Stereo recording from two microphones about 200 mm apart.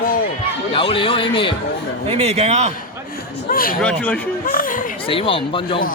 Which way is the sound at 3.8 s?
5° left (ahead or behind).